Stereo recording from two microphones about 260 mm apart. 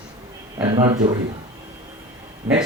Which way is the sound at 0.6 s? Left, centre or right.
Centre.